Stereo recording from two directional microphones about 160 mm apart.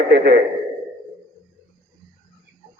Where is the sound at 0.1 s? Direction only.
90° right.